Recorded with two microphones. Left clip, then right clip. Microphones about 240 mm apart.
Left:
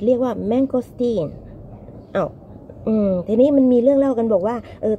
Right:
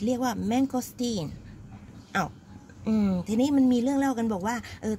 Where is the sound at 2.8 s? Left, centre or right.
Right.